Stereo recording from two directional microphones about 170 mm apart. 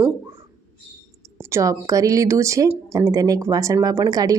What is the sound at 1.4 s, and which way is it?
Speech, 15° right (ahead or behind).